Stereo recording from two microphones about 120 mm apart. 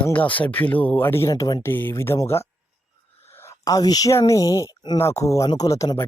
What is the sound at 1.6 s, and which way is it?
Speech, 20° left (ahead or behind).